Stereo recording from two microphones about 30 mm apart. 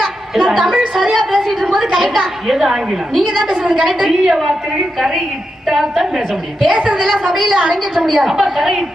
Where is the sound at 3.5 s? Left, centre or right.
Right.